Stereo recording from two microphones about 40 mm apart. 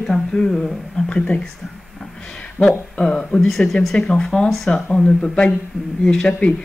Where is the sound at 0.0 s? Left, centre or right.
Centre.